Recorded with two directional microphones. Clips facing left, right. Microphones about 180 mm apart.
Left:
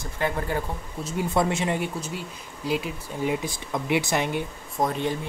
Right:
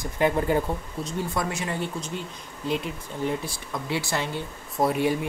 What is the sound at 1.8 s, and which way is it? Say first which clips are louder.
Speech: even; 5° left (ahead or behind).